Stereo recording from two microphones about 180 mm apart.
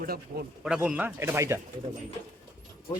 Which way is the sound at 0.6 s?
5° right (ahead or behind).